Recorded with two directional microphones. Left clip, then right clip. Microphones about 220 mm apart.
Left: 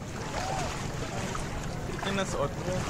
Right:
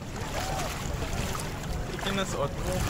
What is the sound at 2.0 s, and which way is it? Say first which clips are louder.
Speech: even; 5° left (ahead or behind).